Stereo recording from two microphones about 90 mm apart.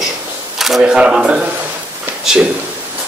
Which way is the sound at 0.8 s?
10° right (ahead or behind).